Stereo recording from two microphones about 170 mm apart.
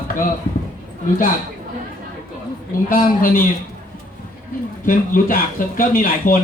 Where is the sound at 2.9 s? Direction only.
55° left (ahead or behind).